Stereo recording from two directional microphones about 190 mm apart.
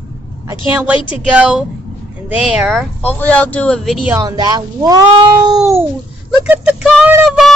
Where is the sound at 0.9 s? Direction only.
25° left (ahead or behind).